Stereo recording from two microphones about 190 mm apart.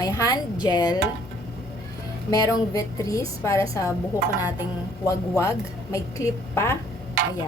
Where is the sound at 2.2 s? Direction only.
15° left (ahead or behind).